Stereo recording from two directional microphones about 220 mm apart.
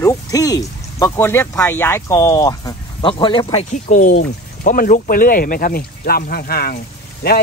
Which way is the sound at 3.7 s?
35° left (ahead or behind).